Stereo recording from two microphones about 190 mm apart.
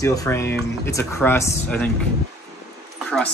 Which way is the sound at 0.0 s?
15° left (ahead or behind).